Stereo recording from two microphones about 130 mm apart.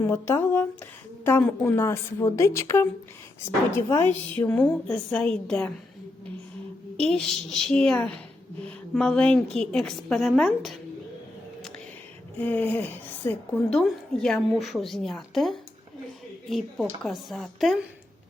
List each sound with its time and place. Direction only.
0.0 s a woman's voice: 20° left (ahead or behind)
4.4 s a woman's voice: 10° left (ahead or behind)
7.1 s a woman's voice: 5° left (ahead or behind)
12.4 s a woman's voice: 15° left (ahead or behind)